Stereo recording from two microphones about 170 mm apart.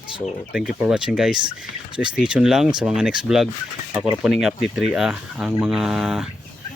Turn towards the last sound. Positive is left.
turn(degrees=-5)  # may be behind; listen again after turning